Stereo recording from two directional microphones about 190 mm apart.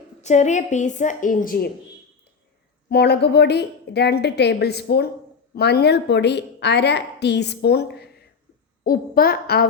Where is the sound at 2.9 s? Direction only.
60° left (ahead or behind).